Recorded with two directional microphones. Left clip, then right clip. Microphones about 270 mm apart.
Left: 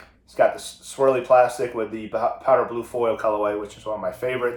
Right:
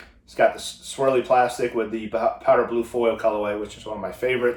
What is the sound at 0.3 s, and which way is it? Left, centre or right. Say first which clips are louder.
Speech: even; centre.